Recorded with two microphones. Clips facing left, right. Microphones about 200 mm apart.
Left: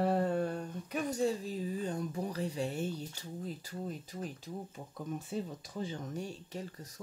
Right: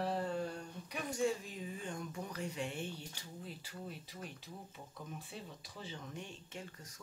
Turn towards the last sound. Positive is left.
turn(degrees=35)  # may be behind; listen again after turning